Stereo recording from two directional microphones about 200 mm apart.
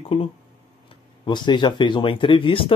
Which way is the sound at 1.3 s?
20° left (ahead or behind).